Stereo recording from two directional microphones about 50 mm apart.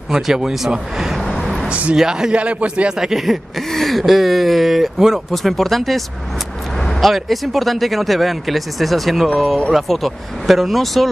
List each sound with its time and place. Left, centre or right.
0.1 s speech: centre
1.2 s vehicle: centre
1.7 s speech: right
2.0 s speech: centre